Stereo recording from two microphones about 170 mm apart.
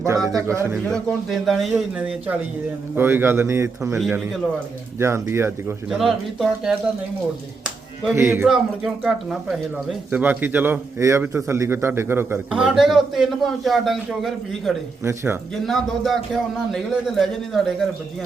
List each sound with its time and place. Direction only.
0.3 s speech: 15° right (ahead or behind)
0.9 s a man's voice: centre (ahead or behind); by 3.9 s 15° right (ahead or behind)
4.9 s a man's voice: 15° right (ahead or behind)
6.0 s speech: centre (ahead or behind)
8.1 s a man's voice: 15° right (ahead or behind)
8.4 s speech: 5° right (ahead or behind)
15.0 s a man's voice: 15° right (ahead or behind)
15.6 s speech: centre (ahead or behind)